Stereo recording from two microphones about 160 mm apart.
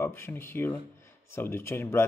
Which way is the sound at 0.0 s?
15° left (ahead or behind).